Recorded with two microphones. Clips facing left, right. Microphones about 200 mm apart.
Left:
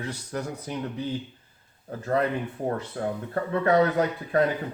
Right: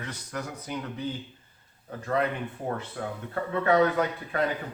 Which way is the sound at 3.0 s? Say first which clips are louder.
Left 4 dB; 35° left (ahead or behind).